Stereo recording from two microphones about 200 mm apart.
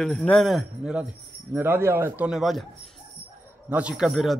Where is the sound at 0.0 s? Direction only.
Centre (ahead or behind).